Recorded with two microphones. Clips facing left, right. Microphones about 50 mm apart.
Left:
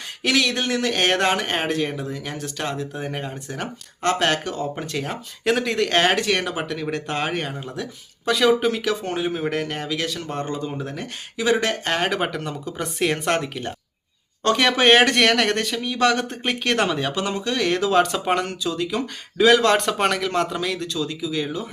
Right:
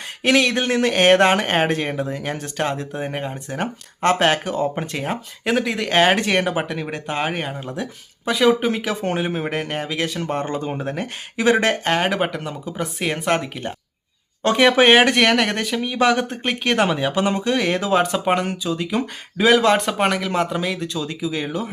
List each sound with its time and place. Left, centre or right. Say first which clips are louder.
0.2 s speech: right 4 dB; right
5.5 s speech: even; centre
8.7 s speech: right 2 dB; right
11.9 s speech: right 2 dB; centre
17.2 s speech: right 3 dB; right